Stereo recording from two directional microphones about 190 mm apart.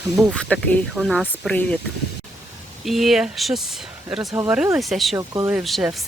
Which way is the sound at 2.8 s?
Centre (ahead or behind).